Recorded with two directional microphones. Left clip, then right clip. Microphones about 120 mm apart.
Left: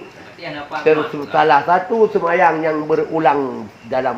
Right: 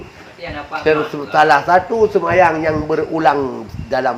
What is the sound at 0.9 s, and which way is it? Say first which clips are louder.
A man's voice: even; 90° right.